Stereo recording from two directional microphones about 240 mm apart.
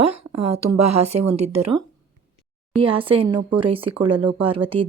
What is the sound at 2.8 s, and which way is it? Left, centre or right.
Speech, right.